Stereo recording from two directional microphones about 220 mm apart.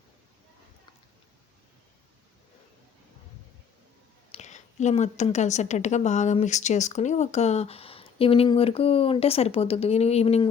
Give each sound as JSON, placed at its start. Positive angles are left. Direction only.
{"t": 4.3, "sound": "a woman's voice", "side_deg": 30}